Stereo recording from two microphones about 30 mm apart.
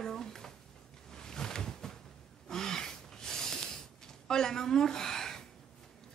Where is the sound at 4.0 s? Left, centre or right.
Centre.